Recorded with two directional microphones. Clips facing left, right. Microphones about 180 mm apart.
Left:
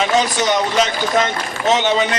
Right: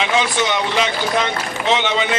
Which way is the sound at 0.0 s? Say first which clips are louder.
Left 2 dB; 40° left (ahead or behind).